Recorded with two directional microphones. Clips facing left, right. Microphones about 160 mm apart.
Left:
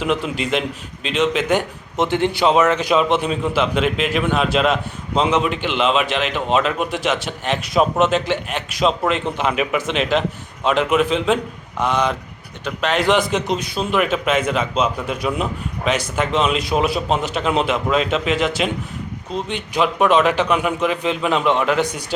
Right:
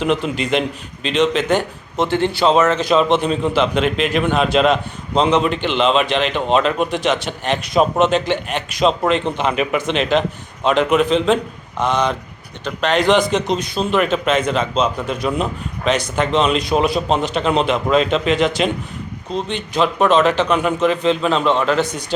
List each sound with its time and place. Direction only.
0.0 s a man's voice: 5° left (ahead or behind)